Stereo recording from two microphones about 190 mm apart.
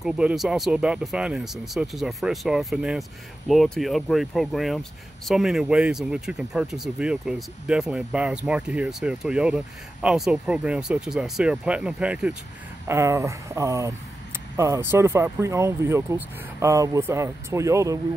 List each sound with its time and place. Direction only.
0.0 s speech: 5° right (ahead or behind)